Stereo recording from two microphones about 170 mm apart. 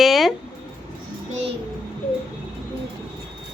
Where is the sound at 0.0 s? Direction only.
Centre (ahead or behind).